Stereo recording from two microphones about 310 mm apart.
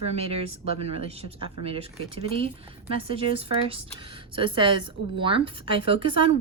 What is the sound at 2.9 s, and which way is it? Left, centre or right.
A woman's voice, centre.